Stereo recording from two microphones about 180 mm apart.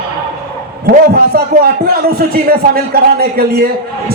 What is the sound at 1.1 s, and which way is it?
Speech, 60° right (ahead or behind).